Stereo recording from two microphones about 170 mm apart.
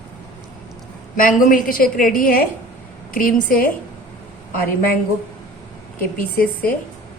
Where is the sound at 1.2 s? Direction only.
55° left (ahead or behind).